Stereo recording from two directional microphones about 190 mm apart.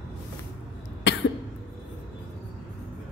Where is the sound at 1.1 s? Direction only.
65° left (ahead or behind).